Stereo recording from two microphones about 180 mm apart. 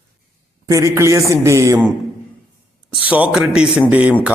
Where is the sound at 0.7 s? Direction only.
15° right (ahead or behind).